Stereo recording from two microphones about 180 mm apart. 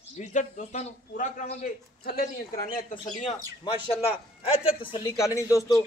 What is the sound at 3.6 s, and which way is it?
A man's voice, 30° left (ahead or behind).